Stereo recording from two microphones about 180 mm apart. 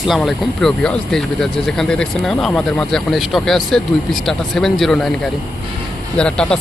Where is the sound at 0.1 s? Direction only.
Centre (ahead or behind).